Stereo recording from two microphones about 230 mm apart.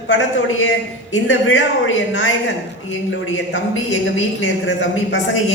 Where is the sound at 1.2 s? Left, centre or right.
Left.